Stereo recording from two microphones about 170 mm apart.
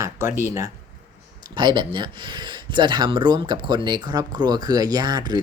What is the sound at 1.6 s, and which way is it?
Speech, 30° right (ahead or behind).